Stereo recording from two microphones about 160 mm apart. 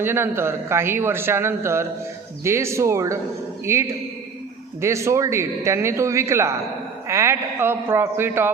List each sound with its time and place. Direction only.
0.0 s a man's voice: 15° right (ahead or behind)